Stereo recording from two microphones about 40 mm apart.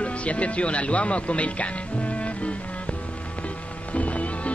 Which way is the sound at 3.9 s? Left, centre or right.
Left.